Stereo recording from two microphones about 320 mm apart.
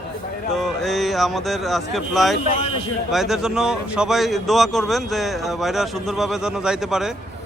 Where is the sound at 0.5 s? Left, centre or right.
Centre.